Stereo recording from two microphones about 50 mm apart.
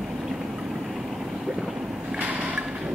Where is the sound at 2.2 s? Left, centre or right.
Right.